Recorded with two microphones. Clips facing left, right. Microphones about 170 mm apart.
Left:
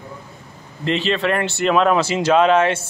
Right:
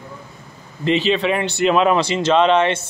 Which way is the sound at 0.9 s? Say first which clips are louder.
Right 2 dB; centre (ahead or behind).